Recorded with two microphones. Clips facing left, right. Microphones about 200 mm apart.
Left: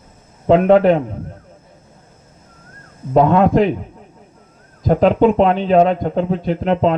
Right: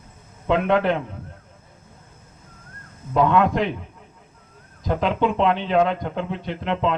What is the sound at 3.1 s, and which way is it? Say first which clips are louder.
A man's voice: left 6 dB; 40° left (ahead or behind).